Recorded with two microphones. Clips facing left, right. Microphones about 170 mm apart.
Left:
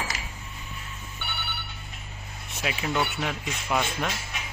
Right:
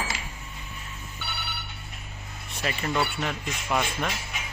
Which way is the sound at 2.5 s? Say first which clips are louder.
Even; centre (ahead or behind).